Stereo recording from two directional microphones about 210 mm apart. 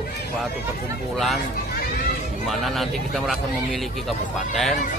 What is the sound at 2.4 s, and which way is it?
Speech, centre (ahead or behind).